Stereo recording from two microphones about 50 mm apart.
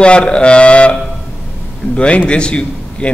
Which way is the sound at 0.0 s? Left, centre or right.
Left.